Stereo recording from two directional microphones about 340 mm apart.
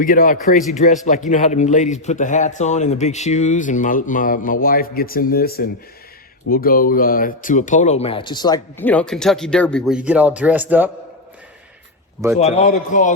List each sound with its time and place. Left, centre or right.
0.0 s a man's voice: left; by 10.9 s centre
12.4 s a man's voice: centre